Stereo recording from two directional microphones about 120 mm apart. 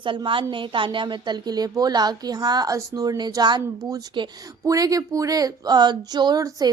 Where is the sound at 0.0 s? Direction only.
45° right (ahead or behind).